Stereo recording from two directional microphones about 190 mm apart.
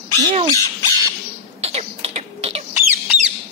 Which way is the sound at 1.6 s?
35° right (ahead or behind).